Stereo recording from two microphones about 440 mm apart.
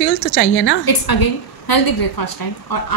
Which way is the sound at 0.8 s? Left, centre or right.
Left.